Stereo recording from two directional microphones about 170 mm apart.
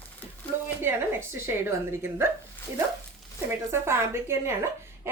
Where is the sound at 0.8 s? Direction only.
15° right (ahead or behind).